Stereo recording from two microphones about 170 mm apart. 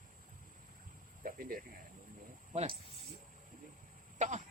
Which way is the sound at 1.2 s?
55° right (ahead or behind).